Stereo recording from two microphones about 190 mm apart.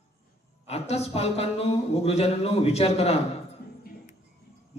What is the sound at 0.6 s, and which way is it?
A man's voice, 35° left (ahead or behind).